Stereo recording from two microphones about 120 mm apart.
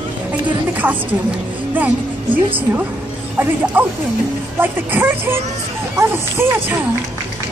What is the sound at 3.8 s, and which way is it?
A woman's voice, 15° right (ahead or behind).